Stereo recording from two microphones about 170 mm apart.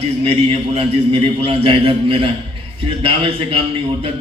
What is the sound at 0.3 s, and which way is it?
A man's voice, 35° right (ahead or behind).